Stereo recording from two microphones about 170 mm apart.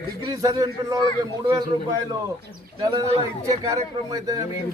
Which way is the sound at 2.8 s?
30° right (ahead or behind).